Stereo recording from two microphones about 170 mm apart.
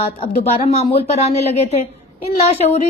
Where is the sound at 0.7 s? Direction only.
40° left (ahead or behind).